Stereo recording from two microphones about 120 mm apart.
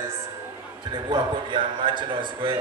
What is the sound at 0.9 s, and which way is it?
A man's voice, 40° right (ahead or behind).